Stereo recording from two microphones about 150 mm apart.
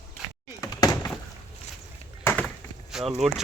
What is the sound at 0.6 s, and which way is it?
Door, 25° left (ahead or behind).